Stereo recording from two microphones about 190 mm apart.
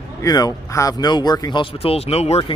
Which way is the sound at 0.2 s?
20° left (ahead or behind).